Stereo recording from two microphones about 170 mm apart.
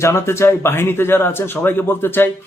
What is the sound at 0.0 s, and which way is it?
Speech, 15° left (ahead or behind).